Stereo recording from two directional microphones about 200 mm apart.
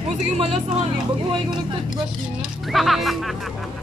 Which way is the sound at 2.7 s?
Centre (ahead or behind).